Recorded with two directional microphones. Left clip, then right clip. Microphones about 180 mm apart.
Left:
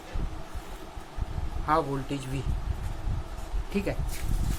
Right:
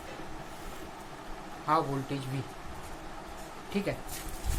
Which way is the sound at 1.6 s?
40° left (ahead or behind).